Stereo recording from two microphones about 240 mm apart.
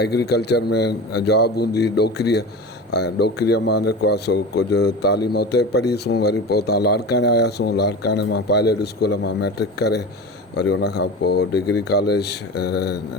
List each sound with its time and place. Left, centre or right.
0.0 s speech: left